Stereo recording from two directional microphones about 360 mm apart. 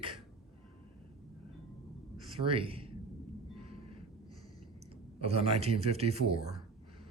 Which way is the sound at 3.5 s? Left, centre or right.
Centre.